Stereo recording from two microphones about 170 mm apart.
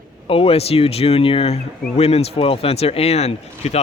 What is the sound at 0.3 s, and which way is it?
Speech, 35° left (ahead or behind).